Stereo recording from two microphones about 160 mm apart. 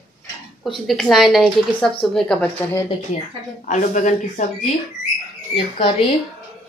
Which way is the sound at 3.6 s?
50° left (ahead or behind).